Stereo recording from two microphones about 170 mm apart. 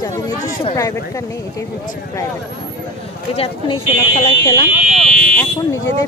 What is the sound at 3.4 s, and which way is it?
Speech, 35° left (ahead or behind).